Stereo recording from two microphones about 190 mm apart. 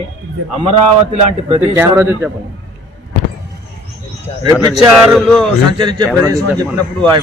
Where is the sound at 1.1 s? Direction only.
35° right (ahead or behind).